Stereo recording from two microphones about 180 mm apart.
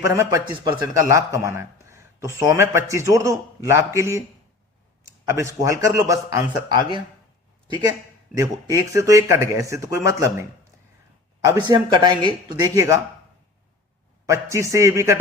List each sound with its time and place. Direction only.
0.0 s speech: 20° right (ahead or behind)
11.4 s speech: 25° right (ahead or behind)
14.3 s speech: 15° right (ahead or behind)